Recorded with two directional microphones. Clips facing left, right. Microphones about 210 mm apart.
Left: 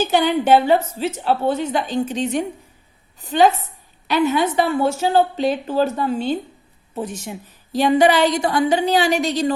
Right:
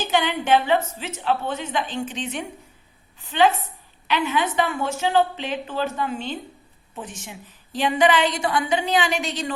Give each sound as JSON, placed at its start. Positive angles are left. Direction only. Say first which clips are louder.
{"t": 0.0, "sound": "a woman's voice", "louder": "left 6 dB", "side_deg": 40}